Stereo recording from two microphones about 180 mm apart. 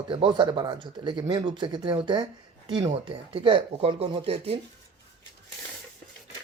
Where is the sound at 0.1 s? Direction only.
25° right (ahead or behind).